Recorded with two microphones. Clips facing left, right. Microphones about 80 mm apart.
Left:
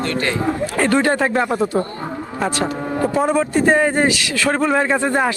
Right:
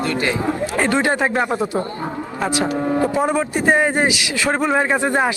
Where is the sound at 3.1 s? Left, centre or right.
Centre.